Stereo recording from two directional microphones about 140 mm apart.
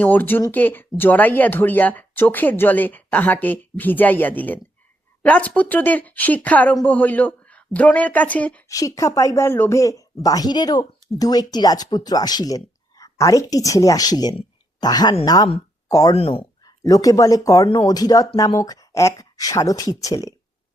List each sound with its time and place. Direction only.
0.0 s speech: 10° left (ahead or behind)
8.7 s speech: 25° left (ahead or behind)
14.3 s a sound: 30° left (ahead or behind)
15.2 s speech: 25° left (ahead or behind)
16.1 s speech: 45° left (ahead or behind)
16.6 s speech: 25° left (ahead or behind)